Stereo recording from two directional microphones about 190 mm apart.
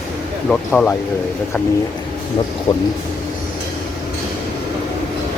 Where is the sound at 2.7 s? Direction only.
25° left (ahead or behind).